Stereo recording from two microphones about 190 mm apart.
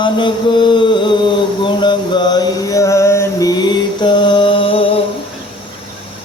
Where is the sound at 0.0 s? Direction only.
25° left (ahead or behind).